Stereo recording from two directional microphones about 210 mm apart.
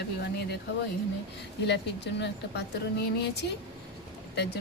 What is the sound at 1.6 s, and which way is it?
Speech, 55° left (ahead or behind).